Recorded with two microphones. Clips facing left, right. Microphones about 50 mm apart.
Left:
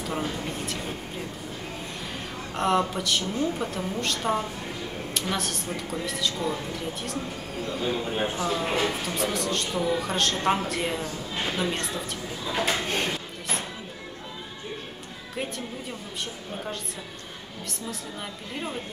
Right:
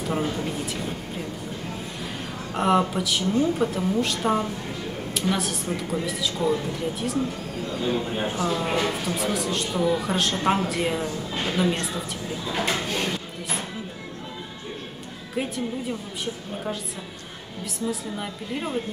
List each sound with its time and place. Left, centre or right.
0.1 s a woman's voice: centre
2.5 s a woman's voice: centre
12.8 s speech: left
17.8 s a woman's voice: centre